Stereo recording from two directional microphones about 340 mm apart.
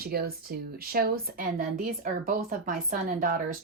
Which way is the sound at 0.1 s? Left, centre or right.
Right.